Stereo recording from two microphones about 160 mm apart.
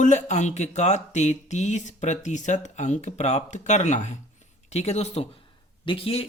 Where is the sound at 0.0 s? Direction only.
45° left (ahead or behind).